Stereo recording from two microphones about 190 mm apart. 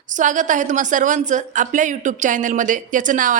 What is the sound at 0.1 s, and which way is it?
A woman's voice, 40° right (ahead or behind).